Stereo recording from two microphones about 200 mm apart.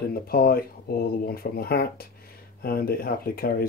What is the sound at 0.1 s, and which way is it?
Speech, 50° left (ahead or behind).